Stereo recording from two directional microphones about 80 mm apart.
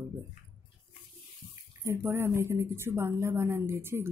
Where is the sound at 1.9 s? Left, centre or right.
Right.